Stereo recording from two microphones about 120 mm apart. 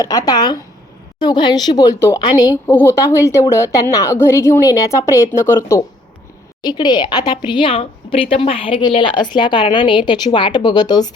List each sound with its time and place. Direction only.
0.0 s speech: 30° left (ahead or behind)
2.0 s a woman's voice: 25° left (ahead or behind)
6.6 s speech: 35° left (ahead or behind)